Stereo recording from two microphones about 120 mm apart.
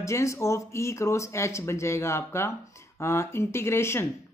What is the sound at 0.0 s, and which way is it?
Speech, 25° left (ahead or behind).